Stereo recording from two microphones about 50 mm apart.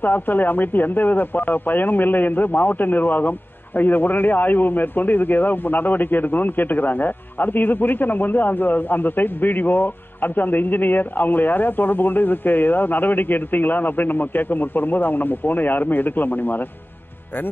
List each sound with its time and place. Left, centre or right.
0.0 s speech: left